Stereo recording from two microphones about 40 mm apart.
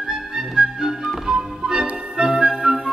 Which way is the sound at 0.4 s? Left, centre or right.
Centre.